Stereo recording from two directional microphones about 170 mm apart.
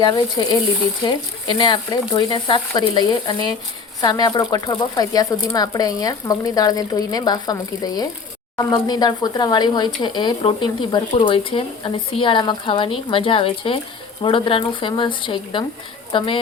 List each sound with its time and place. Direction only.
1.0 s speech: 25° left (ahead or behind)